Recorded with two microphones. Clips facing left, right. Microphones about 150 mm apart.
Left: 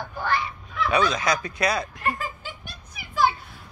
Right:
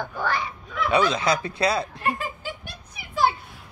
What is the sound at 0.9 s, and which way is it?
Speech, 25° right (ahead or behind).